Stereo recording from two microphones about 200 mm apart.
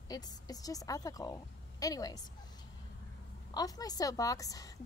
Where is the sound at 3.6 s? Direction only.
20° left (ahead or behind).